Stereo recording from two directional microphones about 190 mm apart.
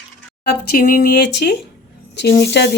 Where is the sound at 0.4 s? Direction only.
50° left (ahead or behind).